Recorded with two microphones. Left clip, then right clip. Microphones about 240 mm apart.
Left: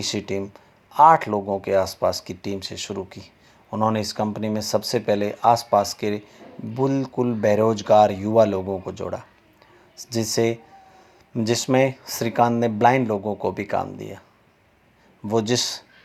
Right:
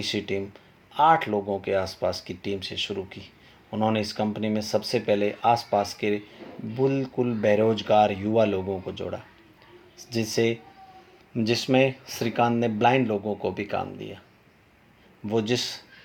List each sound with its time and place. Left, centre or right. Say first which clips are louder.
0.0 s speech: left 2 dB; left
15.3 s speech: left 4 dB; left